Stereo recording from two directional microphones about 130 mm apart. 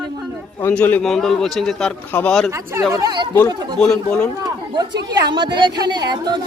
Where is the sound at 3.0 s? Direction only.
35° right (ahead or behind).